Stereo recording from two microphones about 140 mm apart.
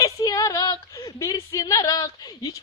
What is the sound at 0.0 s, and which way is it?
A woman's voice, 25° left (ahead or behind).